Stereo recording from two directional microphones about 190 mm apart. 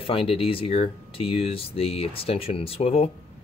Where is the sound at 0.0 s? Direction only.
30° left (ahead or behind).